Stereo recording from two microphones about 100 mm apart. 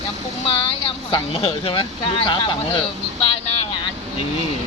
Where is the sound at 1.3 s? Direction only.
70° left (ahead or behind).